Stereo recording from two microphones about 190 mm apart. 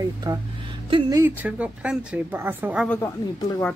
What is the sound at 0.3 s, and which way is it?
A woman's voice, 20° right (ahead or behind).